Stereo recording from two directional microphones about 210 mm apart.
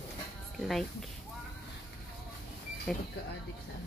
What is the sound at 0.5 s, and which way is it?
Speech, centre (ahead or behind).